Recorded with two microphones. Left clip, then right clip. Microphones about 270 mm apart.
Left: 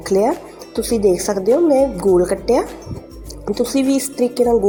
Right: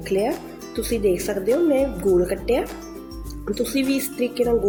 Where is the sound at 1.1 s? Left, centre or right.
Centre.